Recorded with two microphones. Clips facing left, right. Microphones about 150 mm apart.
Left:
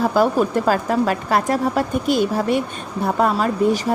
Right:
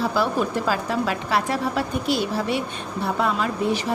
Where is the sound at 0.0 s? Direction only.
45° left (ahead or behind).